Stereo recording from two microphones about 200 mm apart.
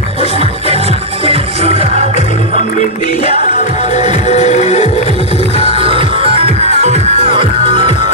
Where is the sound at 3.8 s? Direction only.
35° left (ahead or behind).